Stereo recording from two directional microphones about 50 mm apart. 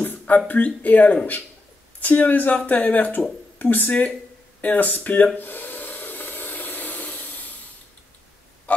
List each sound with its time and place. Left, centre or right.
0.5 s a woman's voice: left
5.4 s a sound: left
8.7 s oink: left